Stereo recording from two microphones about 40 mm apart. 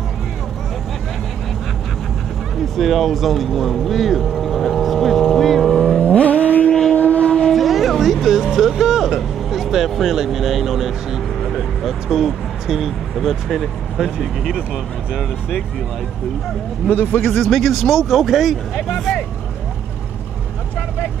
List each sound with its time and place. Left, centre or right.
2.6 s speech: centre
5.9 s vehicle: left
6.7 s vehicle: centre
7.0 s vehicle: left
7.5 s music: centre
10.0 s speech: centre
17.0 s a man's voice: left
17.3 s speech: centre